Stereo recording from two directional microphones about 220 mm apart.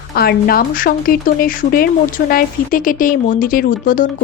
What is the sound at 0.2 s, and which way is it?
Speech, 45° left (ahead or behind).